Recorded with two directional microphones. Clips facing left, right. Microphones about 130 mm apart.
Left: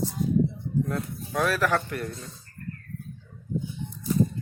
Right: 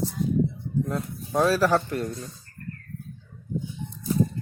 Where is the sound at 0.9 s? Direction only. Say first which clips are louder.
Right 1 dB; 25° right (ahead or behind).